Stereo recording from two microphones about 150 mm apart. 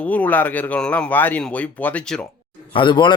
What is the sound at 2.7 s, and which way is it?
Speech, 35° left (ahead or behind).